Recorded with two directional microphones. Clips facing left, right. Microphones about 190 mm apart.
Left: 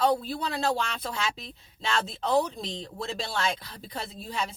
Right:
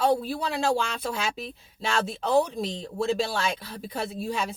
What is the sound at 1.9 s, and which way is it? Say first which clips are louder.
Speech: right 2 dB; 10° right (ahead or behind).